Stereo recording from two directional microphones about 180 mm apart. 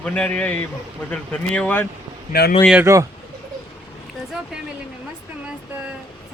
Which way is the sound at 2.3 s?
60° left (ahead or behind).